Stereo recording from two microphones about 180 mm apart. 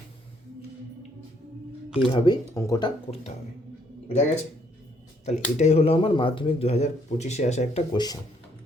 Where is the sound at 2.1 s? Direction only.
25° left (ahead or behind).